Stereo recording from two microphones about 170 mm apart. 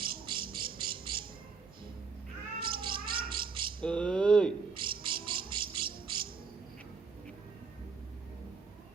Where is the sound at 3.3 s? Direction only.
30° right (ahead or behind).